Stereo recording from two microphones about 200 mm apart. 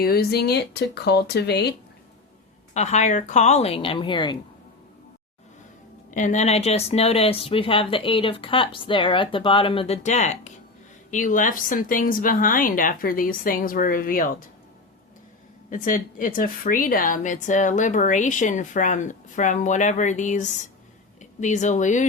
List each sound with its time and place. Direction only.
0.0 s speech: 50° left (ahead or behind)
2.7 s a woman's voice: 35° left (ahead or behind)
6.1 s speech: 40° left (ahead or behind)
15.7 s a woman's voice: 40° left (ahead or behind)